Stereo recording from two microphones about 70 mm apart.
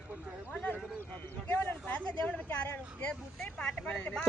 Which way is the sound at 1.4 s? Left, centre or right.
Left.